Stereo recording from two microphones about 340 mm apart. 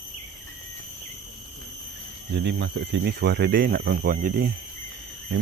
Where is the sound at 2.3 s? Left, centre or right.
Right.